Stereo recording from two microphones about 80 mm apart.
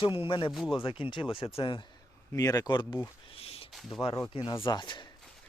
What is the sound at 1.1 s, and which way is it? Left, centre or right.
Speech, left.